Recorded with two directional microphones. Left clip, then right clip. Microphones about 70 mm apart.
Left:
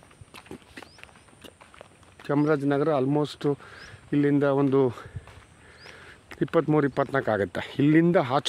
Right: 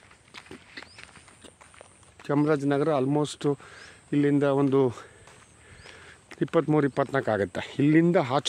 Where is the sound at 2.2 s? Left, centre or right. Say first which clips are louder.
Left 1 dB; right.